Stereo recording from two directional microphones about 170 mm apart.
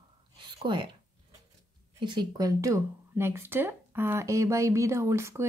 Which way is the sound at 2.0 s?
25° right (ahead or behind).